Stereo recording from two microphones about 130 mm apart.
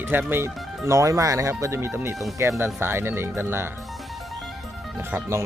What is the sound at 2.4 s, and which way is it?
Speech, 20° right (ahead or behind).